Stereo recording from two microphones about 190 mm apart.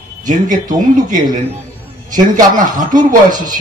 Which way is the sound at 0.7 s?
45° right (ahead or behind).